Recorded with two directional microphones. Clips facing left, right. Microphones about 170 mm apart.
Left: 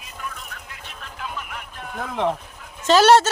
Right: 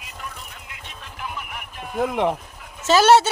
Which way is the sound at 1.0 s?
15° right (ahead or behind).